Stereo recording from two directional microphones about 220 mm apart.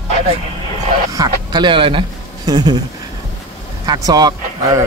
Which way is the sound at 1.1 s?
15° right (ahead or behind).